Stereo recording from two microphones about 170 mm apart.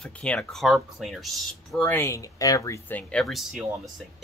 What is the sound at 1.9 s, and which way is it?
Speech, 15° left (ahead or behind).